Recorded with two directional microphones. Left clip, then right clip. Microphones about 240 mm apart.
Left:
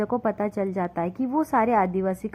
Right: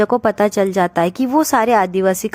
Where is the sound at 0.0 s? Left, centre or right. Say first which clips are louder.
Right 11 dB; right.